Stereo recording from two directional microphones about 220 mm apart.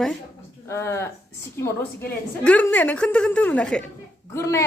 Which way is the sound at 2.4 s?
5° left (ahead or behind).